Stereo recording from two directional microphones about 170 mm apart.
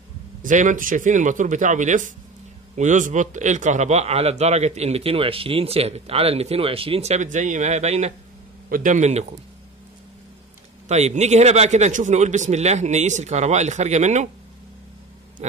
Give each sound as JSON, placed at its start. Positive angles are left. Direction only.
{"t": 0.4, "sound": "a man's voice", "side_deg": -50}
{"t": 8.6, "sound": "a man's voice", "side_deg": -55}
{"t": 10.9, "sound": "a man's voice", "side_deg": -40}